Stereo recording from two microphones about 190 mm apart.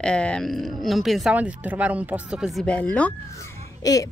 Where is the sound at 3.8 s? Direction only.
20° left (ahead or behind).